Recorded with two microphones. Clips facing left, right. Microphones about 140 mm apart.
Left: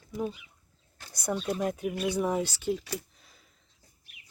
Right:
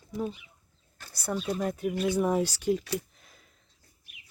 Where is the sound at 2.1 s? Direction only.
5° right (ahead or behind).